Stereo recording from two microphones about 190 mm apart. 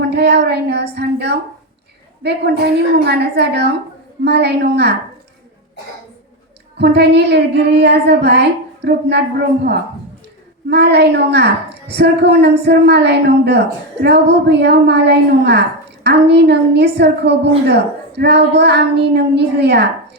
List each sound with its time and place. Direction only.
0.1 s a woman's voice: 60° right (ahead or behind)
6.7 s a woman's voice: 60° right (ahead or behind)
10.7 s a woman's voice: 60° right (ahead or behind)